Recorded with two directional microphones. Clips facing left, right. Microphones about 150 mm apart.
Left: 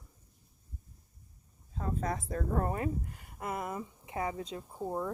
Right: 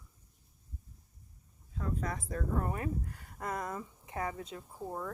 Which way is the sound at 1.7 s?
35° left (ahead or behind).